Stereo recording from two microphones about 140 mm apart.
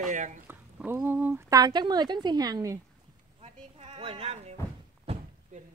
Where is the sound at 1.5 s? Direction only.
30° right (ahead or behind).